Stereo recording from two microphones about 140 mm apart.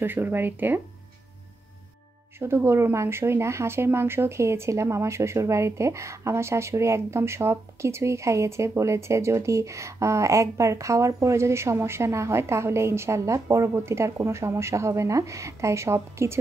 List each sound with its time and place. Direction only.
0.0 s speech: 15° right (ahead or behind)
2.3 s speech: 15° right (ahead or behind)